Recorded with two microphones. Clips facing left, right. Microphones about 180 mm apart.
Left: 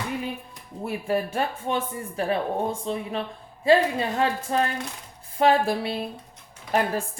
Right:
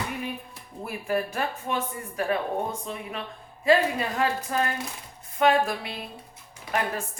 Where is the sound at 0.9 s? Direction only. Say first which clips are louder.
Left 2 dB; 25° left (ahead or behind).